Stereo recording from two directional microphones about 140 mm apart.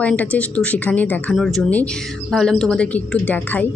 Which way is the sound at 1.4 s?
Centre (ahead or behind).